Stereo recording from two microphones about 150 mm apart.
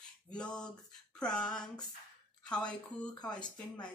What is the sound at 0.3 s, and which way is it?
A woman's voice, 5° left (ahead or behind).